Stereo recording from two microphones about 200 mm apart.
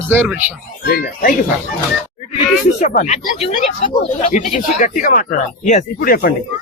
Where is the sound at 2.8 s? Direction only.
40° left (ahead or behind).